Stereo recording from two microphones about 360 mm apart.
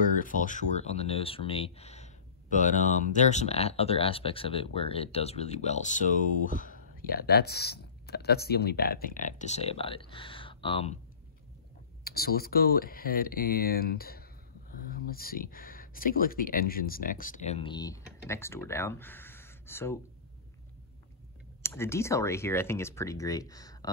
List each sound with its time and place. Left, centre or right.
0.0 s speech: left
12.0 s speech: left; by 20.0 s centre
21.6 s speech: centre